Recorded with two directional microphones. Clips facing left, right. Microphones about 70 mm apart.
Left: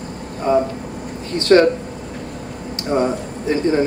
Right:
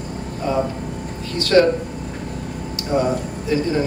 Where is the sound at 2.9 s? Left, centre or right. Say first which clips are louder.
Left 1 dB; left.